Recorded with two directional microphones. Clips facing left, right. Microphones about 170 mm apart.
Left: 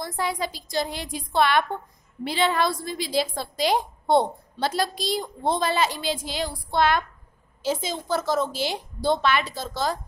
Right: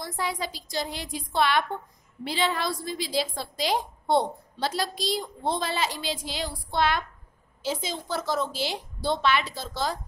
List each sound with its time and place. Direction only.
0.0 s a woman's voice: 55° left (ahead or behind)